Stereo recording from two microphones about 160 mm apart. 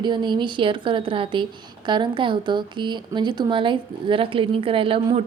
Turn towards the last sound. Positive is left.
turn(degrees=-35)  # may be behind; listen again after turning